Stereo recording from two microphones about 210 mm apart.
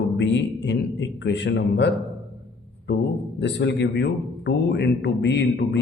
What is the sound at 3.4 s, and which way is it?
A man's voice, 55° left (ahead or behind).